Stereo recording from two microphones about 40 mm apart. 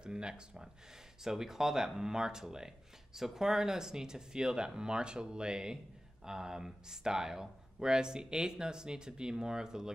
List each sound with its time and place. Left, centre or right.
0.0 s speech: right